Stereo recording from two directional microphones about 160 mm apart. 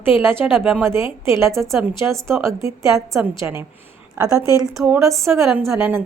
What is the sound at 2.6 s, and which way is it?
A woman's voice, 20° right (ahead or behind).